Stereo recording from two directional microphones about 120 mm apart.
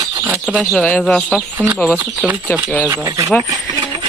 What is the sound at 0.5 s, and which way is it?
Speech, centre (ahead or behind).